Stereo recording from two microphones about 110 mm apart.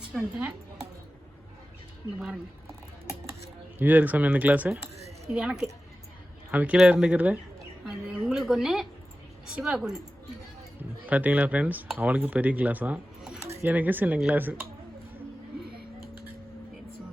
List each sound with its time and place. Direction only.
0.1 s a woman's voice: 5° left (ahead or behind)
2.1 s a woman's voice: 5° right (ahead or behind)
3.8 s speech: 15° right (ahead or behind)
4.9 s a sound: 75° right (ahead or behind)
5.3 s a woman's voice: 5° right (ahead or behind)
10.8 s speech: 15° right (ahead or behind)